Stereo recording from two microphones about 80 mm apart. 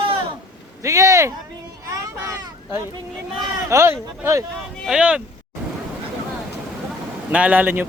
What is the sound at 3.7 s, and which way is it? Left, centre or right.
Speech, right.